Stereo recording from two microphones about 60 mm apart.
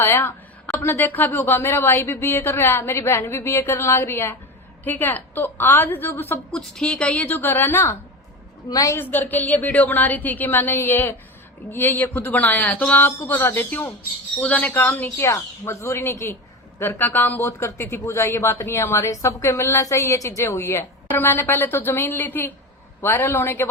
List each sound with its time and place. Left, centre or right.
0.0 s speech: left
4.9 s speech: left
6.6 s a woman's voice: centre; by 7.9 s left
9.0 s speech: left
12.2 s a woman's voice: left
15.2 s a woman's voice: left
16.8 s speech: left
18.0 s a woman's voice: left
21.1 s speech: left